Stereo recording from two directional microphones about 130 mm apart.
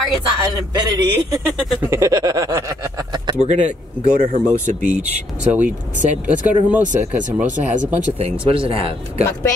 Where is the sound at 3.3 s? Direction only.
60° right (ahead or behind).